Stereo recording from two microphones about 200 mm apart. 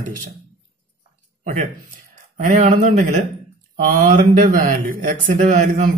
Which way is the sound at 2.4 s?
35° right (ahead or behind).